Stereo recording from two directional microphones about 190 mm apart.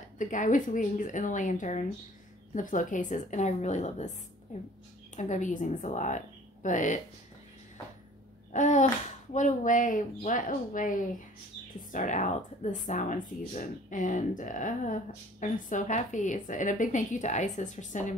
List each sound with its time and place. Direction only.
0.2 s speech: 40° left (ahead or behind)
5.1 s speech: 40° left (ahead or behind)
8.5 s speech: 40° left (ahead or behind)